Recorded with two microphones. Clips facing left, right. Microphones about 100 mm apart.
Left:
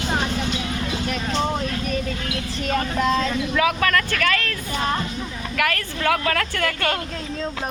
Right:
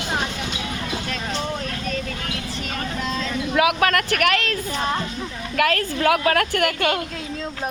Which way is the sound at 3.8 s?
65° right (ahead or behind).